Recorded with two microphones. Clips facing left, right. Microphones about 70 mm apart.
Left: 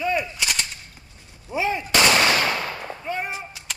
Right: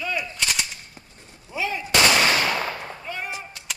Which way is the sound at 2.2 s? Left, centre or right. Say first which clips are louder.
Left 1 dB; left.